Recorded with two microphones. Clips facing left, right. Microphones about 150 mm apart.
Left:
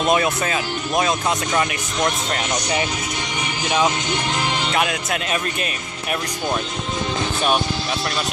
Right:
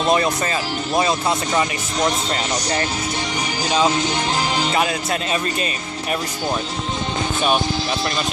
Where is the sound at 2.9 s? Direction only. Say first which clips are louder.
Right 2 dB; 35° right (ahead or behind).